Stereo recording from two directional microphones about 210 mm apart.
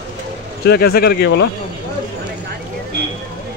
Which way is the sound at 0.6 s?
50° left (ahead or behind).